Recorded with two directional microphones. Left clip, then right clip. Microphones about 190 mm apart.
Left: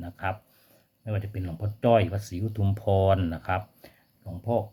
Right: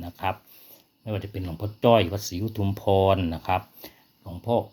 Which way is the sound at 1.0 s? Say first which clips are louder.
Right 3 dB; 25° right (ahead or behind).